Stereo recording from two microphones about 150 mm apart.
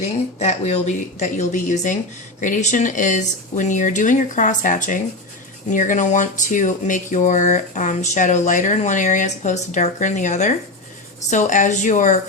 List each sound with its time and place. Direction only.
0.0 s speech: 50° left (ahead or behind)